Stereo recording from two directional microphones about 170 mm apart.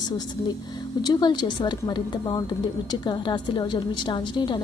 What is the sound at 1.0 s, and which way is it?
A woman's voice, 25° left (ahead or behind).